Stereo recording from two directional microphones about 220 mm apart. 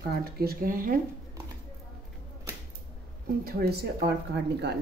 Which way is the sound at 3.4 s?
45° right (ahead or behind).